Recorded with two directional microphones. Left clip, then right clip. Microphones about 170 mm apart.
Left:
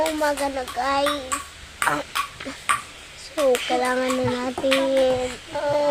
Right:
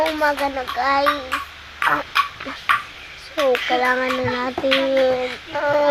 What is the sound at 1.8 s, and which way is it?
Duck, 30° left (ahead or behind).